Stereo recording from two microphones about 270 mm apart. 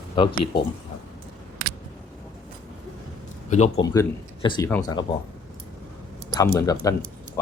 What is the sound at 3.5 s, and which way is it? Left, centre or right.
Speech, left.